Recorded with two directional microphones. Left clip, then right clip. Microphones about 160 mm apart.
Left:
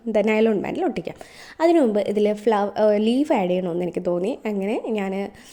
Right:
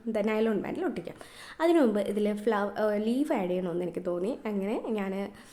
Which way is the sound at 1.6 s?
25° left (ahead or behind).